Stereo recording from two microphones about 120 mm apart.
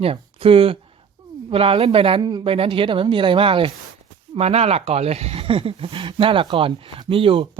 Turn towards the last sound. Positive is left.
turn(degrees=-45)  # may be behind; listen again after turning